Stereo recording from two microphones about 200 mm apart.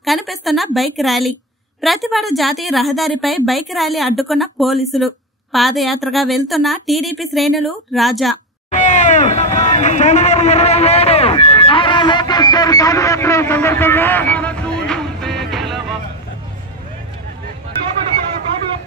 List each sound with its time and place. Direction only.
0.0 s a woman's voice: centre (ahead or behind)
8.6 s a sound: 35° left (ahead or behind); by 15.4 s centre (ahead or behind)
15.5 s music: centre (ahead or behind)